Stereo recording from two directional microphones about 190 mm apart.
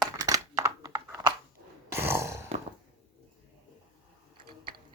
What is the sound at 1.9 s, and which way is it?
Grunt, 15° right (ahead or behind).